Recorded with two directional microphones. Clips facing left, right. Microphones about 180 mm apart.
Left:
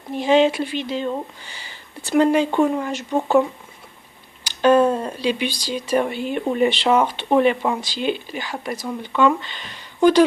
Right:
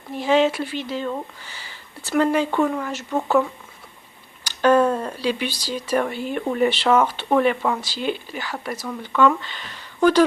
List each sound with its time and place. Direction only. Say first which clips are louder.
0.2 s speech: left 2 dB; 20° left (ahead or behind)
4.6 s speech: left 2 dB; 10° left (ahead or behind)
5.5 s speech: left 2 dB; 5° right (ahead or behind)
5.7 s speech: left 2 dB; 10° left (ahead or behind)